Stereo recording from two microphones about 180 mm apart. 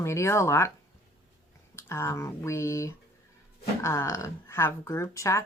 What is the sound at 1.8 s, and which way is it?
Speech, 15° left (ahead or behind).